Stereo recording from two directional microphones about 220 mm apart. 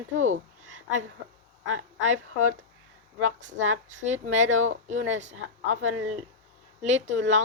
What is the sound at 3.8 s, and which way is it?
Speech, 35° right (ahead or behind).